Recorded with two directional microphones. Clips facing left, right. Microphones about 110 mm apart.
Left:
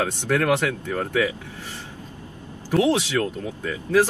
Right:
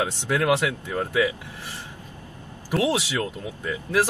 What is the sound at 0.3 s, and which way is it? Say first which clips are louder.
Speech: left 1 dB; 15° right (ahead or behind).